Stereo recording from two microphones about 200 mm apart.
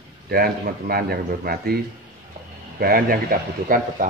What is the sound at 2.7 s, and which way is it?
Speech, 50° right (ahead or behind).